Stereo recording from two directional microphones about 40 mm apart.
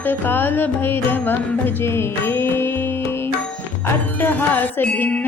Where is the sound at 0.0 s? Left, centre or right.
Left.